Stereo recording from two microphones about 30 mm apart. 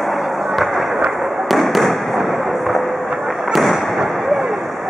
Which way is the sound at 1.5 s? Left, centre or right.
Centre.